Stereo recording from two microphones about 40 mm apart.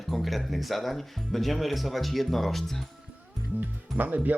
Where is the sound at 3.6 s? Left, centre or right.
Right.